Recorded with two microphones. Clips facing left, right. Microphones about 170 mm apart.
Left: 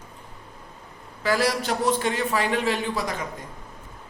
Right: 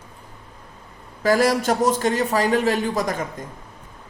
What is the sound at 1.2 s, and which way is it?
A man's voice, 45° right (ahead or behind).